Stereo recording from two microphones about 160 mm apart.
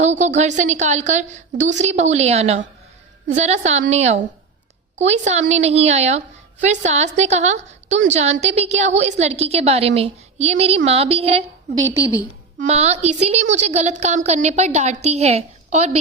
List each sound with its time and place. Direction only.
0.0 s a woman's voice: 45° right (ahead or behind)
12.5 s a woman's voice: 40° right (ahead or behind)